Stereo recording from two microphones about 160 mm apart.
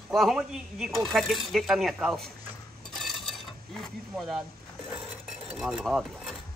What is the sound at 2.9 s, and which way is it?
Mechanisms, centre (ahead or behind).